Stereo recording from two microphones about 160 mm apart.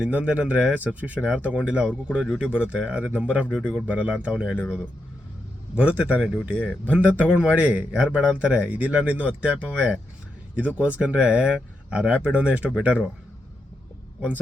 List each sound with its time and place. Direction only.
0.0 s a man's voice: 10° right (ahead or behind)
5.7 s a man's voice: 5° right (ahead or behind)